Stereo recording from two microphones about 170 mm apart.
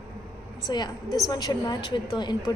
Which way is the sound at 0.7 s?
25° left (ahead or behind).